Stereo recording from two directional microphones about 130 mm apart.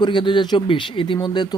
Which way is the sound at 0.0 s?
40° left (ahead or behind).